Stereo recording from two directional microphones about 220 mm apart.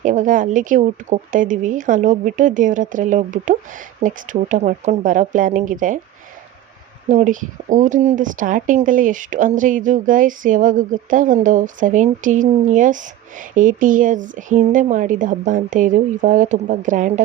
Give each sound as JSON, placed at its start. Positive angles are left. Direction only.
{"t": 0.0, "sound": "speech", "side_deg": -35}
{"t": 7.1, "sound": "speech", "side_deg": -35}